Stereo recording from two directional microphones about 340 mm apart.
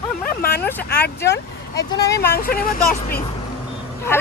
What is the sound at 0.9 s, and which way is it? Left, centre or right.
Speech, left.